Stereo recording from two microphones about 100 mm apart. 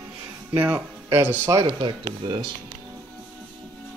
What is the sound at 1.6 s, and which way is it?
Speech, 55° right (ahead or behind).